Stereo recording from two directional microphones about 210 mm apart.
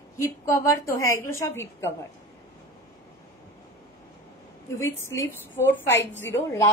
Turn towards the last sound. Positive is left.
turn(degrees=10)  # may be behind; listen again after turning